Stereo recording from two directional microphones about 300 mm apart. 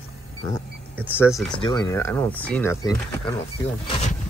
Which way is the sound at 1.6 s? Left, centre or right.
Centre.